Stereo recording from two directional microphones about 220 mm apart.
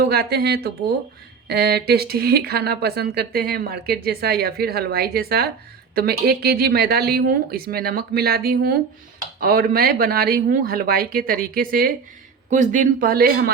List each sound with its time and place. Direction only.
0.0 s speech: 45° right (ahead or behind)